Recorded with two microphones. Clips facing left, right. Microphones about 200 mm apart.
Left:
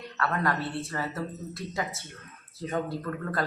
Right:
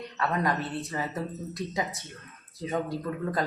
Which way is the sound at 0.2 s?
15° right (ahead or behind).